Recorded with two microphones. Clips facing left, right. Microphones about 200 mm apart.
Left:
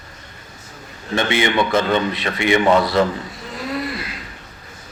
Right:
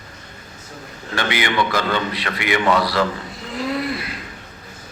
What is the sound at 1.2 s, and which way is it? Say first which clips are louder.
A man's voice: left 3 dB; 25° left (ahead or behind).